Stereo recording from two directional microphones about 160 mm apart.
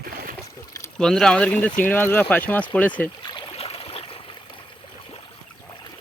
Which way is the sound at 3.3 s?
35° left (ahead or behind).